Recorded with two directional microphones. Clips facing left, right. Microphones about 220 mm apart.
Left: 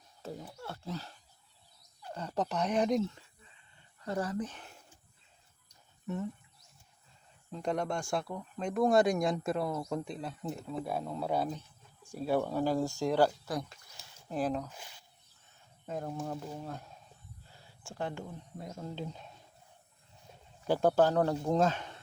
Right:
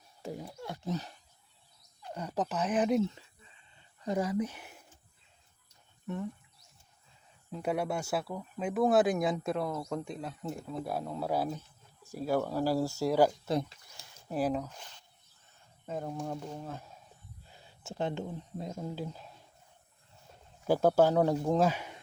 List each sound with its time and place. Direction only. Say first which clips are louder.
0.2 s speech: right 3 dB; 15° right (ahead or behind)
2.1 s speech: even; 10° right (ahead or behind)
6.1 s speech: even; centre (ahead or behind)
7.5 s speech: right 1 dB; 5° right (ahead or behind)
13.4 s speech: right 5 dB; 20° right (ahead or behind)
13.9 s a sound: right 2 dB; 5° right (ahead or behind)
14.7 s speech: even; 10° left (ahead or behind)
17.5 s speech: right 5 dB; 20° right (ahead or behind)
18.9 s speech: right 2 dB; 5° right (ahead or behind)
20.7 s speech: right 2 dB; 10° right (ahead or behind)